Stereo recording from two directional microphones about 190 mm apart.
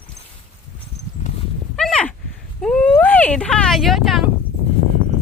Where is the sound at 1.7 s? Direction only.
5° left (ahead or behind).